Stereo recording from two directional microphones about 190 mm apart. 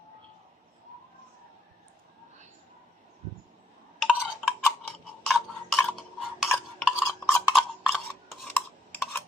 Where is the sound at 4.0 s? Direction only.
5° right (ahead or behind).